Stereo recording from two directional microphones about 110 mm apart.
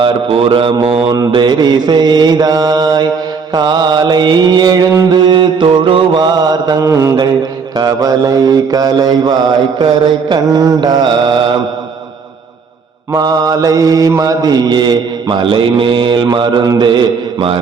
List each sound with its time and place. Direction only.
0.0 s a man's voice: 50° right (ahead or behind)
1.1 s mantra: 40° right (ahead or behind)
13.1 s mantra: 35° right (ahead or behind)
14.2 s a man's voice: 35° right (ahead or behind)